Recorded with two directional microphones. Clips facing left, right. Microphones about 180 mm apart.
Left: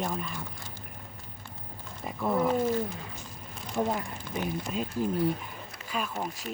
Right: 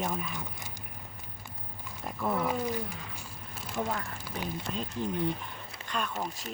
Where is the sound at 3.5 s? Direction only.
5° right (ahead or behind).